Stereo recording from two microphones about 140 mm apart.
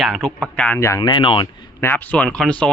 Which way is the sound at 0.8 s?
20° left (ahead or behind).